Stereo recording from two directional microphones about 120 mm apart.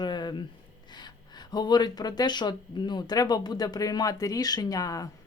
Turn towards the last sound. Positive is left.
turn(degrees=30)  # may be behind; listen again after turning